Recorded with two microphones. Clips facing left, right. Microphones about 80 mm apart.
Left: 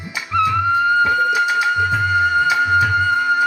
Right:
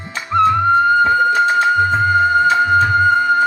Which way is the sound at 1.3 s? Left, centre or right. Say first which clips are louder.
Right 3 dB; centre.